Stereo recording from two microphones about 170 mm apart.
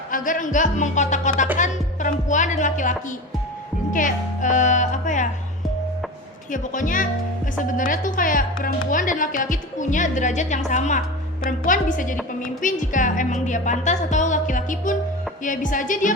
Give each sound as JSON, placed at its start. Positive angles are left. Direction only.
{"t": 0.1, "sound": "speech", "side_deg": 50}
{"t": 3.9, "sound": "speech", "side_deg": 50}
{"t": 6.5, "sound": "speech", "side_deg": 50}